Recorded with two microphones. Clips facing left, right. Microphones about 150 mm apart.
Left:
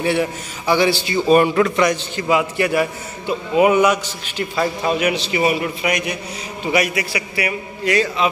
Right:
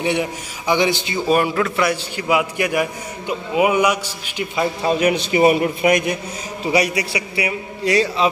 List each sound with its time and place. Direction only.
0.0 s a man's voice: 15° right (ahead or behind)
1.1 s a man's voice: 5° right (ahead or behind)
4.8 s a man's voice: 30° right (ahead or behind)
5.3 s a man's voice: 45° right (ahead or behind)
6.7 s a man's voice: 30° right (ahead or behind)